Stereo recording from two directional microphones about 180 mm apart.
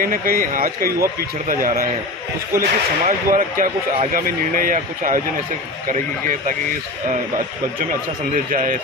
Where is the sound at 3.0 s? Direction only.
50° right (ahead or behind).